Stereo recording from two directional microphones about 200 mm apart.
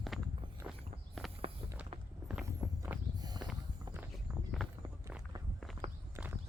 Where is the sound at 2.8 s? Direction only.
20° right (ahead or behind).